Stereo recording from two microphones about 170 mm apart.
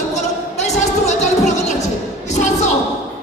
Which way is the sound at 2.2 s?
45° left (ahead or behind).